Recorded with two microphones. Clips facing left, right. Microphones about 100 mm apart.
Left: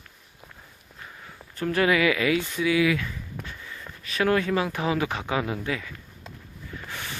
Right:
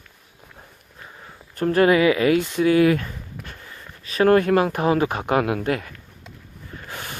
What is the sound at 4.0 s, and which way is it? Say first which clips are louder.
Speech: right 7 dB; 35° right (ahead or behind).